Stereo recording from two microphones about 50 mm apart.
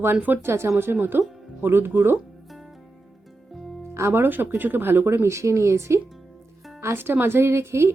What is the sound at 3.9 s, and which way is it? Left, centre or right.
Music, right.